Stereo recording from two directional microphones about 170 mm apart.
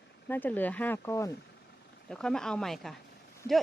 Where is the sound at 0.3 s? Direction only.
10° left (ahead or behind).